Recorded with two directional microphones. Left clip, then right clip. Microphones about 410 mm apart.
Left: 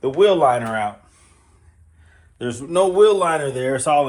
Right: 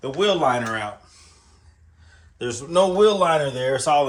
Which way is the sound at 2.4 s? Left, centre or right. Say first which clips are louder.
Left 1 dB; centre.